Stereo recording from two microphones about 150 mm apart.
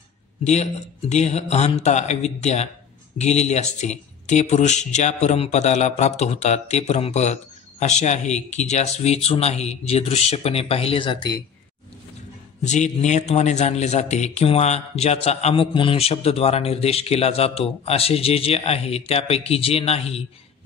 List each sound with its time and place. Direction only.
0.4 s a man's voice: 50° left (ahead or behind); by 11.4 s 35° left (ahead or behind)
12.6 s a man's voice: 50° left (ahead or behind)